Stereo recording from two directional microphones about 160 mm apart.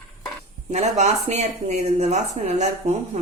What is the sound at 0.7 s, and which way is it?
Speech, 45° right (ahead or behind).